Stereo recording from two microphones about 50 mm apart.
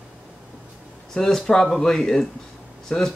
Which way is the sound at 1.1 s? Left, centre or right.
Centre.